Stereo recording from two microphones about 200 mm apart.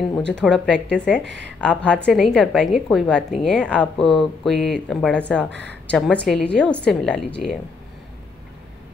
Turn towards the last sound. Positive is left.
turn(degrees=5)  # may be behind; listen again after turning